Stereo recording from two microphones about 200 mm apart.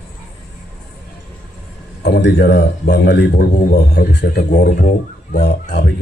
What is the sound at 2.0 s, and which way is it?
A man's voice, 55° left (ahead or behind).